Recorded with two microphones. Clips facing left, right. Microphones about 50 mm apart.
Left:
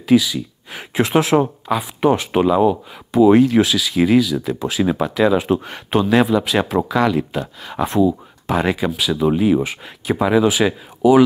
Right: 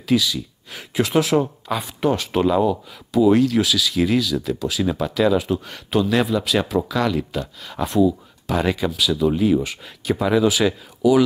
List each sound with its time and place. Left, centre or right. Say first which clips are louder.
0.0 s speech: left 5 dB; centre